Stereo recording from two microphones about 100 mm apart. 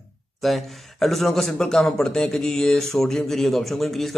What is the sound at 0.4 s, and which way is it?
A man's voice, centre (ahead or behind).